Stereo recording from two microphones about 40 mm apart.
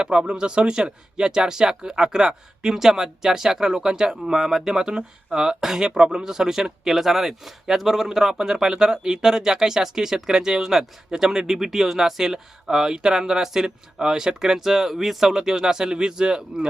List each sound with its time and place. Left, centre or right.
0.0 s speech: right